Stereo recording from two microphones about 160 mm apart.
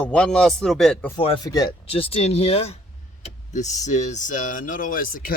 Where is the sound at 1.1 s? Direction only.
35° left (ahead or behind).